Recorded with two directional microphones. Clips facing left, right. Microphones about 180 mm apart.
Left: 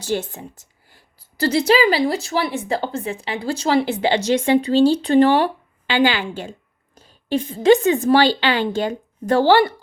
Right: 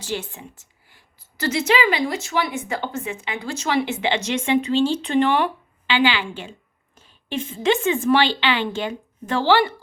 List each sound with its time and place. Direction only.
0.0 s a woman's voice: 40° left (ahead or behind)